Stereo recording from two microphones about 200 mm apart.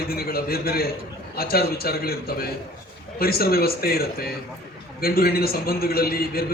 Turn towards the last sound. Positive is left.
turn(degrees=50)  # may be behind; listen again after turning